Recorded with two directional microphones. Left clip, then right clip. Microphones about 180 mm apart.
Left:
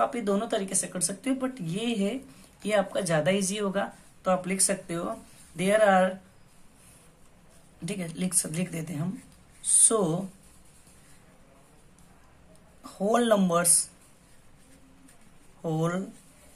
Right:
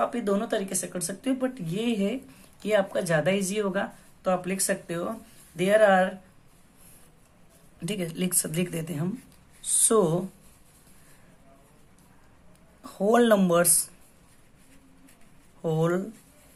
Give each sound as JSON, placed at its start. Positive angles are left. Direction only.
{"t": 0.0, "sound": "speech", "side_deg": -20}
{"t": 7.8, "sound": "speech", "side_deg": -25}
{"t": 12.8, "sound": "speech", "side_deg": -25}
{"t": 15.6, "sound": "speech", "side_deg": -20}